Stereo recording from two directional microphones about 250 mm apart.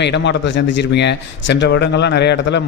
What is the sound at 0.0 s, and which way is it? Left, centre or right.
A man's voice, left.